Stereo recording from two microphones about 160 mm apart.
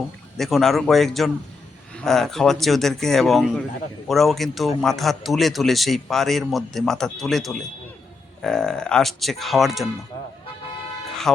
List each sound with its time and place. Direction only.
0.3 s a man's voice: centre (ahead or behind)